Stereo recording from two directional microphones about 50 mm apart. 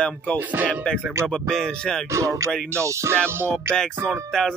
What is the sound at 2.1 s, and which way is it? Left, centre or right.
Speech, right.